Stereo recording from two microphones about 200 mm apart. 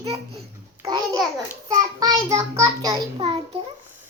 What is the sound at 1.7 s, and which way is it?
Child singing, 20° right (ahead or behind).